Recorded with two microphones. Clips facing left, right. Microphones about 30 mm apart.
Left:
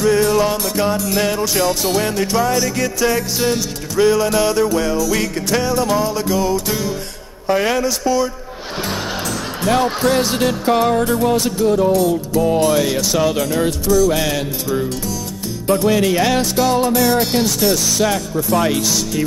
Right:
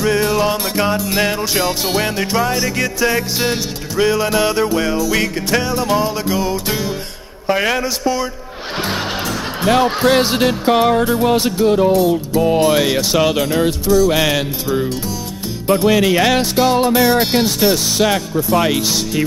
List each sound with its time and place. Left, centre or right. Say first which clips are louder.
0.0 s music: left 1 dB; centre
9.6 s speech: right 2 dB; right
10.1 s music: right 2 dB; right
15.7 s music: right 2 dB; right